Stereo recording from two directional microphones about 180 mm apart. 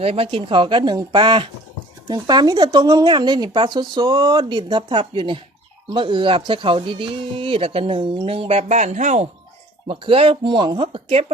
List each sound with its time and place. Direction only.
0.0 s speech: 30° right (ahead or behind)
9.8 s speech: 30° right (ahead or behind)